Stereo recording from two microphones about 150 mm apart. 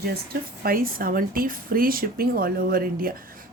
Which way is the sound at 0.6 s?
75° right (ahead or behind).